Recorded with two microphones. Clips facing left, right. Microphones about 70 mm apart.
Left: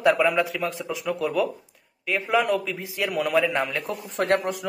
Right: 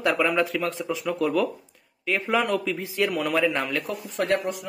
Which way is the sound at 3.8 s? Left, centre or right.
Left.